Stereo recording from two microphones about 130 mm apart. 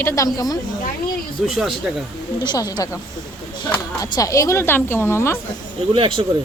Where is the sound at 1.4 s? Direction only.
Centre (ahead or behind).